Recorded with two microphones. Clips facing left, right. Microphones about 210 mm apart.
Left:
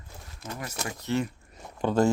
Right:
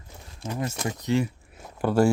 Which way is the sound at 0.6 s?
25° right (ahead or behind).